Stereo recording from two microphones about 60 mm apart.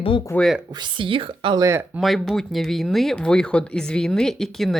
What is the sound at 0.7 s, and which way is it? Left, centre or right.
Speech, right.